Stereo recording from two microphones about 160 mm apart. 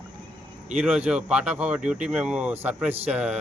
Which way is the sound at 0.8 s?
5° right (ahead or behind).